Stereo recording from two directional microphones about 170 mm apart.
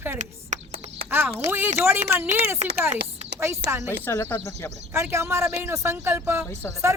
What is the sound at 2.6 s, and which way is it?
Speech, 45° right (ahead or behind).